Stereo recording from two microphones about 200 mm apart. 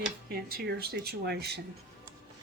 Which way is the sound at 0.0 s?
50° right (ahead or behind).